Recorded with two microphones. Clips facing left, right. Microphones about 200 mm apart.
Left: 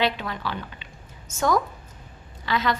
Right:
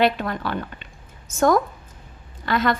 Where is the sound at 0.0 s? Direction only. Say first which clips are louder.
Right 5 dB; 50° right (ahead or behind).